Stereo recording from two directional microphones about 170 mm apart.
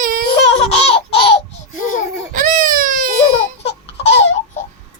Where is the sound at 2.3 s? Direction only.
50° right (ahead or behind).